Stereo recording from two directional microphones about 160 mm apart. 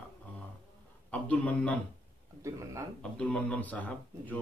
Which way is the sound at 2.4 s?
20° right (ahead or behind).